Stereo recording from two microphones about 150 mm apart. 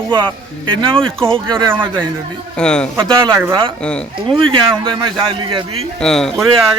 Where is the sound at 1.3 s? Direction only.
35° right (ahead or behind).